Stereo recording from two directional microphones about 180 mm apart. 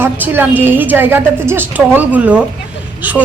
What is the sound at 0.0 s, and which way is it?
A woman's voice, 10° right (ahead or behind).